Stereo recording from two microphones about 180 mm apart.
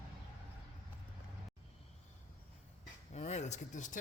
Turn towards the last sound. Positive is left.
turn(degrees=45)  # may be behind; listen again after turning